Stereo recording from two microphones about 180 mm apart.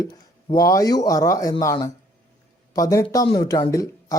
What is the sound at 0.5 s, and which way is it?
Speech, 20° left (ahead or behind).